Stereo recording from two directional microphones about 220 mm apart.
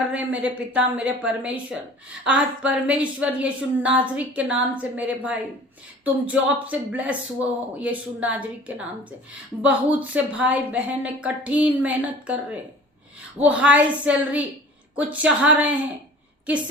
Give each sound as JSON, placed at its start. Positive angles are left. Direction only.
{"t": 0.1, "sound": "speech", "side_deg": -5}